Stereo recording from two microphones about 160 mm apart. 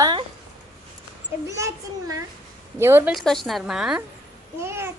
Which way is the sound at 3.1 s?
Centre (ahead or behind).